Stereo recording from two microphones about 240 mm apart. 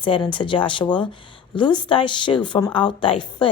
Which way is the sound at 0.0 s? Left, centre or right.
Centre.